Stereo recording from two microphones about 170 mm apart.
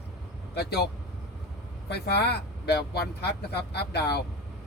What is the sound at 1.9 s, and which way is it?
Speech, 75° left (ahead or behind).